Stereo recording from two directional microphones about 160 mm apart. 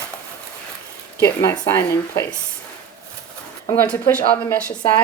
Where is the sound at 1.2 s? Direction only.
20° left (ahead or behind).